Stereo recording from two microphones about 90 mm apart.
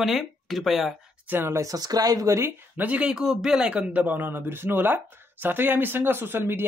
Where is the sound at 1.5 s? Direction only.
45° right (ahead or behind).